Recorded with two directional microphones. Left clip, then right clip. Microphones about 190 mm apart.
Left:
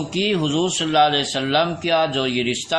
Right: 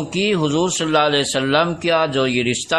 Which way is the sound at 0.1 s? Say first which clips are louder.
Right 2 dB; 50° right (ahead or behind).